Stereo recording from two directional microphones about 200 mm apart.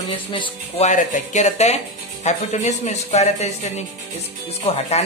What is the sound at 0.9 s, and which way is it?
Speech, 35° left (ahead or behind).